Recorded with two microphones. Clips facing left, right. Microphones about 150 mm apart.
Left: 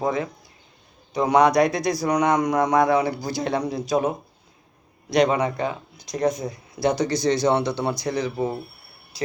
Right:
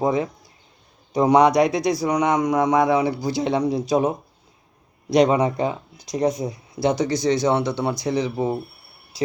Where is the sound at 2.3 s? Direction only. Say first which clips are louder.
Right 2 dB; 5° right (ahead or behind).